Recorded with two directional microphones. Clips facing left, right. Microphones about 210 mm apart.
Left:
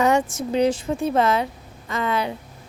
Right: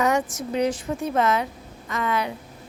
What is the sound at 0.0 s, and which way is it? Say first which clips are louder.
A woman's voice: left 3 dB; 30° left (ahead or behind).